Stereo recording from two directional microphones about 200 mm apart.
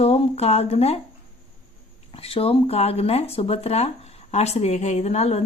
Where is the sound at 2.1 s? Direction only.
30° left (ahead or behind).